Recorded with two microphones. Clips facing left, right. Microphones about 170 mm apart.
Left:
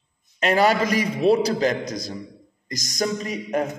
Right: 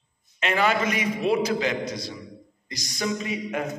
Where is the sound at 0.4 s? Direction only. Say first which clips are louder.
Left 4 dB; 40° left (ahead or behind).